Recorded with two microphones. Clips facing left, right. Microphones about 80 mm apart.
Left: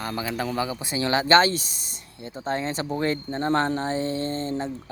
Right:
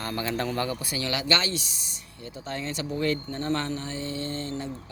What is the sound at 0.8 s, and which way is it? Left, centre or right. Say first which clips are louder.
Speech: left 7 dB; left.